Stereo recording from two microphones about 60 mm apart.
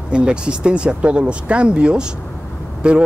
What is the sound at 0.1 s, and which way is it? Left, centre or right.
Speech, centre.